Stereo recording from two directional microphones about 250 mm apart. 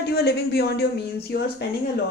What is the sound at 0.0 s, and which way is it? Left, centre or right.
A man's voice, left.